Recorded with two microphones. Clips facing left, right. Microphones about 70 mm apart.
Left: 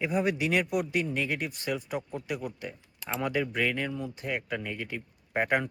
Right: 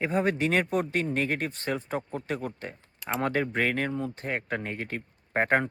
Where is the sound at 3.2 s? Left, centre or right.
Right.